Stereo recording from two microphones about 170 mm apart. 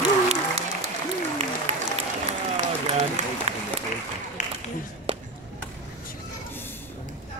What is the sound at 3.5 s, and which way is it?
Applause, 40° right (ahead or behind).